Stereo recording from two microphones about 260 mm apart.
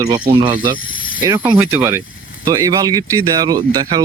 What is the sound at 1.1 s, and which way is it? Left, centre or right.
Speech, centre.